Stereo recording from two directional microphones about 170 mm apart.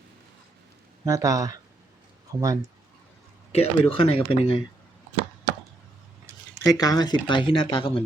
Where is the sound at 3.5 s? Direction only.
35° left (ahead or behind).